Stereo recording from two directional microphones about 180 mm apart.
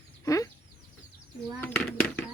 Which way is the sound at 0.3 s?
20° left (ahead or behind).